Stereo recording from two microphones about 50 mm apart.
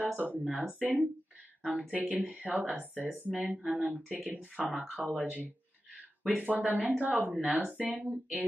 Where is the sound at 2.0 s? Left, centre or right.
Right.